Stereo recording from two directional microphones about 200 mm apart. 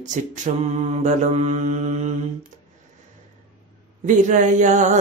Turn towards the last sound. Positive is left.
turn(degrees=-40)  # may be behind; listen again after turning